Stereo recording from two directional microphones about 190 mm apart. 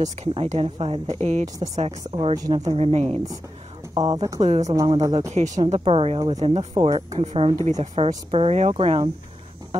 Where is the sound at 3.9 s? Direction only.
20° right (ahead or behind).